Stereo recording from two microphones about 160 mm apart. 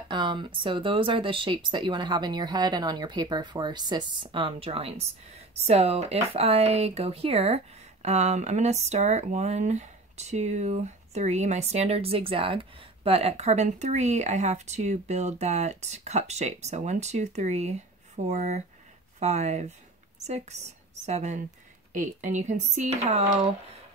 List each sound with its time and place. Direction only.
0.1 s speech: 30° right (ahead or behind); by 23.5 s 45° right (ahead or behind)